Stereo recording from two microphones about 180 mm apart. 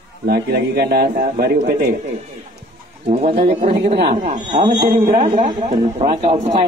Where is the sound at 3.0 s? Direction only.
35° right (ahead or behind).